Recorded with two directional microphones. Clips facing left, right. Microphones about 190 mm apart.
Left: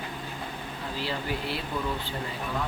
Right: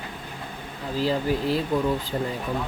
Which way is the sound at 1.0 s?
40° right (ahead or behind).